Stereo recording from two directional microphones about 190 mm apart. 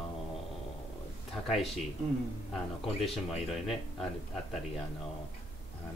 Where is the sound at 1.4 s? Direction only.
Centre (ahead or behind).